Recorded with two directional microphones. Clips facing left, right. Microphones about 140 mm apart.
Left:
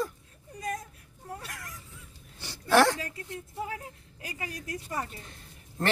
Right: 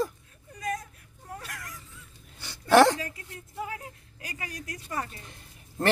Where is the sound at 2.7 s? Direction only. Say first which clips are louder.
Right 4 dB; 20° right (ahead or behind).